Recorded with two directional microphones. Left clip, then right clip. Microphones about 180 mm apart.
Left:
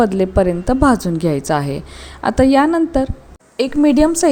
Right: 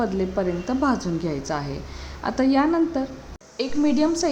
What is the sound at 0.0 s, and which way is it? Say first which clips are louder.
A woman's voice: left 10 dB; 45° left (ahead or behind).